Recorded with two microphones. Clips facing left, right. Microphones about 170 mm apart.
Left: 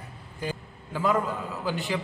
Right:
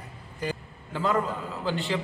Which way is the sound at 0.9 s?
10° left (ahead or behind).